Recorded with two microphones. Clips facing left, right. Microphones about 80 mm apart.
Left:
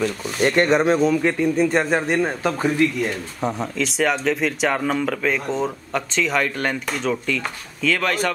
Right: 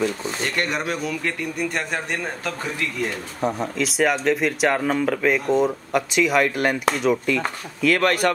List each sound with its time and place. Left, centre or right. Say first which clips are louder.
0.4 s speech: left 10 dB; left
3.3 s speech: right 2 dB; centre